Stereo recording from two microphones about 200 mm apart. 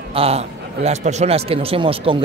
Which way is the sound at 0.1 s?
30° right (ahead or behind).